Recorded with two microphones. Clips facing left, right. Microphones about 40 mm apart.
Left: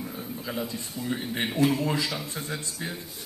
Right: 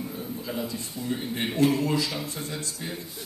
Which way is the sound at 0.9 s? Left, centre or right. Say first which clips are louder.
Left 1 dB; centre.